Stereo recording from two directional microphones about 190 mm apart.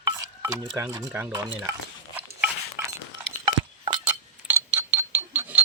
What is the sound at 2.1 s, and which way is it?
Stir, 10° right (ahead or behind).